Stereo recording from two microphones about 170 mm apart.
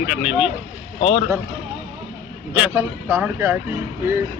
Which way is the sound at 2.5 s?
10° right (ahead or behind).